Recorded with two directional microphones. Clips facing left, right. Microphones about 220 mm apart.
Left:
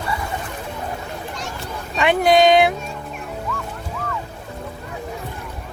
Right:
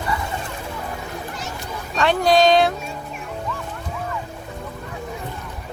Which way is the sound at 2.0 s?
20° left (ahead or behind).